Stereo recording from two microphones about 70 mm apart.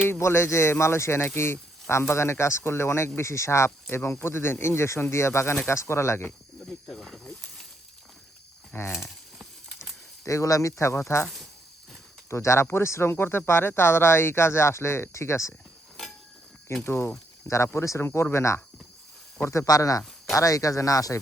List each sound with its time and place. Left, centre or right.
0.2 s speech: left
3.8 s speech: left
6.7 s snake: centre
8.7 s speech: left
10.2 s speech: left
12.3 s speech: left
16.8 s speech: left